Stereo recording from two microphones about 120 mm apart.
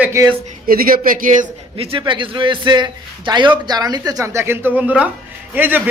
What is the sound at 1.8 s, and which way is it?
A man's voice, 50° right (ahead or behind).